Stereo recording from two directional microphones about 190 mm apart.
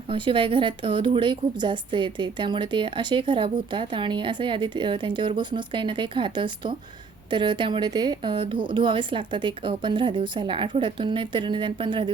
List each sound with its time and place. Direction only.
0.1 s a woman's voice: 30° right (ahead or behind)